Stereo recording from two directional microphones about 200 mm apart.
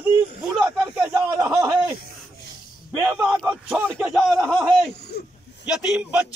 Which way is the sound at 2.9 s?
10° right (ahead or behind).